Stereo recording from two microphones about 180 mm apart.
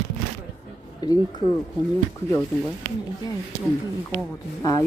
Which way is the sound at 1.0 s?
25° left (ahead or behind).